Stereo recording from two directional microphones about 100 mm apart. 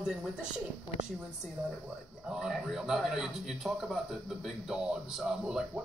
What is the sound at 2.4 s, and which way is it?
Speech, 5° right (ahead or behind).